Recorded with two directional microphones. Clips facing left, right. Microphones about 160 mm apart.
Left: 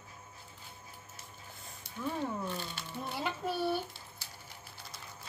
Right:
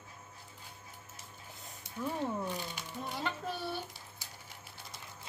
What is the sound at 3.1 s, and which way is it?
Music, 5° left (ahead or behind).